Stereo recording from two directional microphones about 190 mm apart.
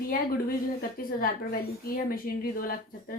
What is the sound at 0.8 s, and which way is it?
A woman's voice, 50° left (ahead or behind).